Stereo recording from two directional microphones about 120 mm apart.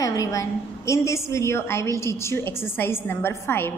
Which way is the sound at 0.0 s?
30° left (ahead or behind).